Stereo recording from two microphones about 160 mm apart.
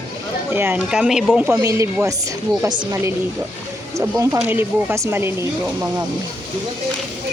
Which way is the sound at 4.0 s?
20° right (ahead or behind).